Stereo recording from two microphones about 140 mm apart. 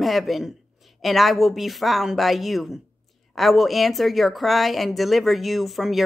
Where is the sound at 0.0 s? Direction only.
Centre (ahead or behind).